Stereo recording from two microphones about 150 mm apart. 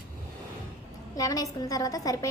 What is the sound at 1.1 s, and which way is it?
A woman's voice, 25° left (ahead or behind).